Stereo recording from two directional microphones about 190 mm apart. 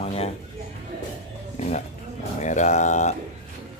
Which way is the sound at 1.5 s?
40° left (ahead or behind).